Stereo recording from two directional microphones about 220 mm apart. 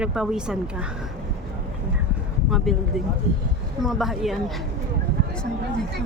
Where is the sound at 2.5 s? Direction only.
Centre (ahead or behind).